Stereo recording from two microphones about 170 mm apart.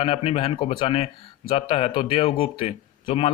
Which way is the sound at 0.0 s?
35° left (ahead or behind).